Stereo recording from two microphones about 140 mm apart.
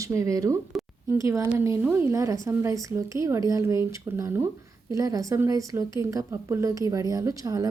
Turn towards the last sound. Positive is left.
turn(degrees=-25)  # may be behind; listen again after turning